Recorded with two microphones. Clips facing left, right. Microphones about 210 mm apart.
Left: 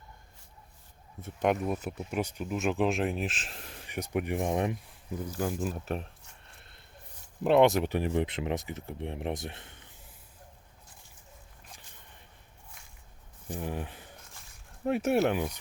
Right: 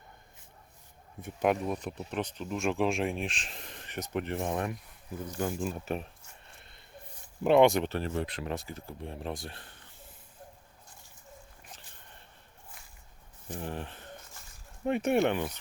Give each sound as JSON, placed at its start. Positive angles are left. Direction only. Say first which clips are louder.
{"t": 1.2, "sound": "speech", "louder": "even", "side_deg": -5}
{"t": 5.2, "sound": "speech", "louder": "even", "side_deg": 5}
{"t": 6.4, "sound": "a sound", "louder": "right 1 dB", "side_deg": 0}
{"t": 7.4, "sound": "speech", "louder": "even", "side_deg": 0}
{"t": 7.9, "sound": "speech", "louder": "left 4 dB", "side_deg": 15}
{"t": 13.5, "sound": "speech", "louder": "left 2 dB", "side_deg": 10}